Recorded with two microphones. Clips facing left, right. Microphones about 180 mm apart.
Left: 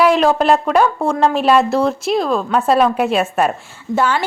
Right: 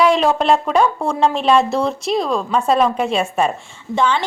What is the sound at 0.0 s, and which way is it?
A woman's voice, centre (ahead or behind).